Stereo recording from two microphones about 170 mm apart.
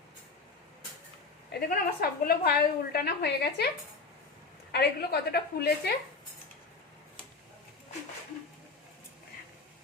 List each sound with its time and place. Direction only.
1.5 s a woman's voice: 65° left (ahead or behind)
4.7 s a woman's voice: 70° left (ahead or behind)